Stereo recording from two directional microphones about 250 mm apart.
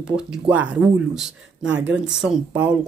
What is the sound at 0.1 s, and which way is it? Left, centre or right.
Speech, centre.